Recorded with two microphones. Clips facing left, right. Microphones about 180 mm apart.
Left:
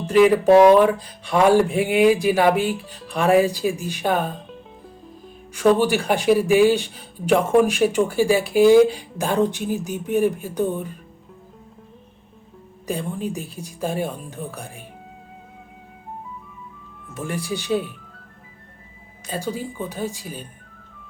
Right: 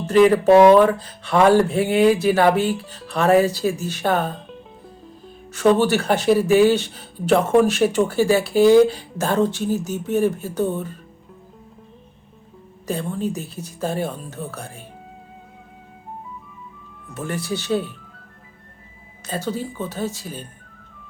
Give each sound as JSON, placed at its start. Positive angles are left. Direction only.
{"t": 0.0, "sound": "speech", "side_deg": 10}
{"t": 5.5, "sound": "speech", "side_deg": 10}
{"t": 12.9, "sound": "speech", "side_deg": 15}
{"t": 17.1, "sound": "speech", "side_deg": 10}
{"t": 19.3, "sound": "speech", "side_deg": 10}